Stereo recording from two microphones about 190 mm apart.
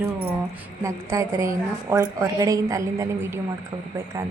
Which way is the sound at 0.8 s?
15° right (ahead or behind).